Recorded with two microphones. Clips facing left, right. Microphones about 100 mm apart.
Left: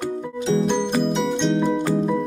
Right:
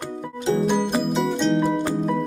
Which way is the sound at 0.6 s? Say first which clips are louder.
Left 1 dB; 5° right (ahead or behind).